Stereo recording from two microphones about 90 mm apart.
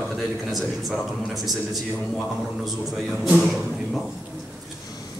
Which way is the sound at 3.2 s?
Centre (ahead or behind).